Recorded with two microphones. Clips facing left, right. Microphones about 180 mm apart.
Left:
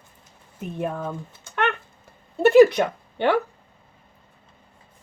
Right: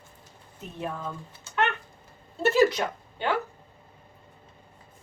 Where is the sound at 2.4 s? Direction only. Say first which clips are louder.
Left 8 dB; 60° left (ahead or behind).